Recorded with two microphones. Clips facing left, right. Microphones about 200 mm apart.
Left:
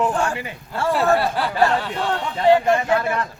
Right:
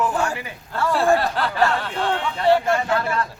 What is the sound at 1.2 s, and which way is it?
Speech, 10° left (ahead or behind).